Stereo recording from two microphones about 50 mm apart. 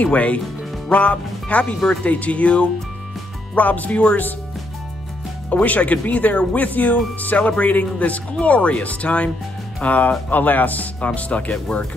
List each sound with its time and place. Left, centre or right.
0.0 s speech: left
5.5 s speech: left